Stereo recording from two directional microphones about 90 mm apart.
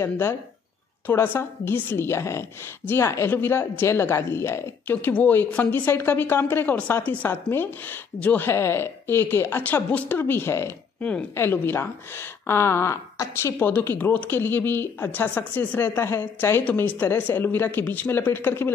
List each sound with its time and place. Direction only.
0.0 s a woman's voice: 25° left (ahead or behind)
11.0 s a woman's voice: 10° left (ahead or behind)
11.3 s a woman's voice: 25° left (ahead or behind)